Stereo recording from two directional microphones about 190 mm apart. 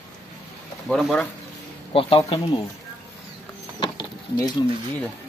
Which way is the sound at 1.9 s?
25° left (ahead or behind).